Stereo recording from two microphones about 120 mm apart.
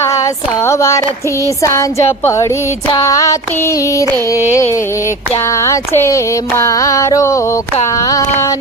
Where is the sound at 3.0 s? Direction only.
25° left (ahead or behind).